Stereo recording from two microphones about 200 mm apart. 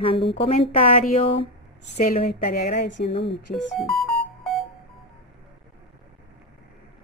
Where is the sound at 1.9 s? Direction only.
40° left (ahead or behind); by 3.2 s 55° left (ahead or behind).